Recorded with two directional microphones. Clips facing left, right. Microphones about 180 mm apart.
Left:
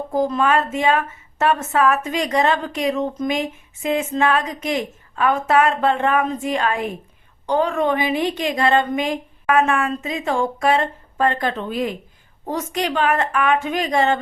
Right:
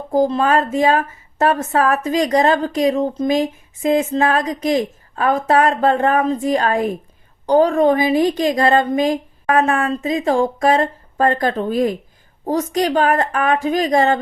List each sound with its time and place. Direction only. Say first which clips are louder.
0.1 s a woman's voice: right 4 dB; 35° right (ahead or behind)